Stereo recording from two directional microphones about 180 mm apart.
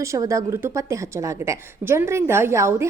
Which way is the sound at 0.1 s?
15° right (ahead or behind).